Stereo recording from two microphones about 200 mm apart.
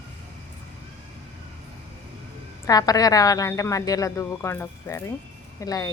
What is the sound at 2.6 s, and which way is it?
A woman's voice, 20° left (ahead or behind).